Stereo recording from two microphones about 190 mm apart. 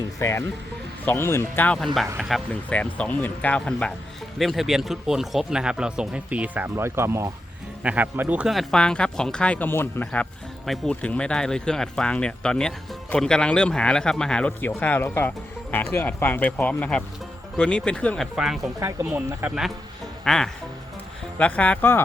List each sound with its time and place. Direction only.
0.2 s speech: 15° left (ahead or behind)
2.0 s speech: 5° right (ahead or behind)